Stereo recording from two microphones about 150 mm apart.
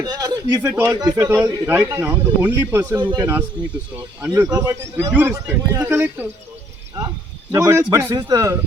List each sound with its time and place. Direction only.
0.0 s a sound: 25° right (ahead or behind)
0.6 s speech: 15° right (ahead or behind)
7.5 s speech: 20° right (ahead or behind)